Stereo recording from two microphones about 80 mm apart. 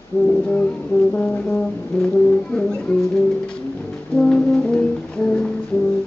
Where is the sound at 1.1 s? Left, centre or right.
Centre.